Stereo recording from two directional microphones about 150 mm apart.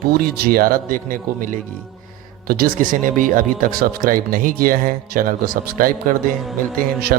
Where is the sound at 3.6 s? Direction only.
75° right (ahead or behind).